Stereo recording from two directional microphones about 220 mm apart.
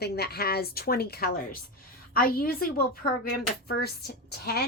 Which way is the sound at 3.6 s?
45° left (ahead or behind).